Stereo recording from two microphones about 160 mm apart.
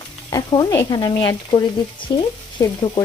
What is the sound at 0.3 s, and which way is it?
Stir, 20° left (ahead or behind).